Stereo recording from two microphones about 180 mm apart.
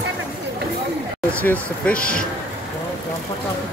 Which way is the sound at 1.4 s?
10° left (ahead or behind).